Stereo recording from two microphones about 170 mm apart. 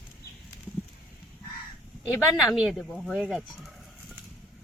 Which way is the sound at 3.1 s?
5° left (ahead or behind).